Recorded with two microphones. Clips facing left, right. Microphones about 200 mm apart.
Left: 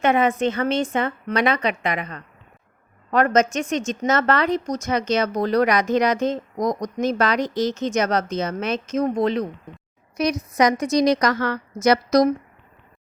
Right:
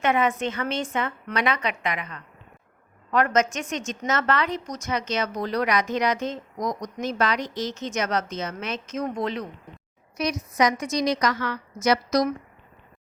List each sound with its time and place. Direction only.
0.0 s a woman's voice: 30° left (ahead or behind)